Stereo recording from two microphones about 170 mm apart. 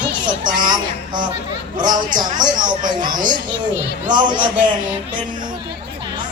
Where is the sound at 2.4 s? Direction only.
25° right (ahead or behind).